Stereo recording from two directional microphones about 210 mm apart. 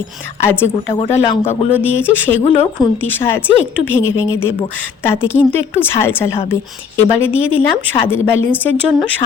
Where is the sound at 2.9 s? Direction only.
10° left (ahead or behind).